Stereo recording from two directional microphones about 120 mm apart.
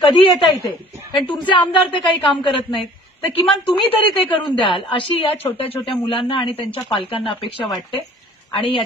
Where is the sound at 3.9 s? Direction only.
50° left (ahead or behind).